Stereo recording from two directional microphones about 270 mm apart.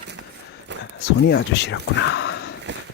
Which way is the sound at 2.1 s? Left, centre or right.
Left.